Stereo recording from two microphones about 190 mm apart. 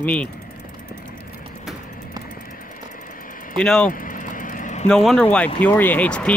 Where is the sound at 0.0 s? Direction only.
5° left (ahead or behind).